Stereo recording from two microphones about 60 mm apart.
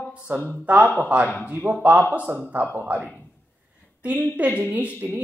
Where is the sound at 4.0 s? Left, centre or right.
Right.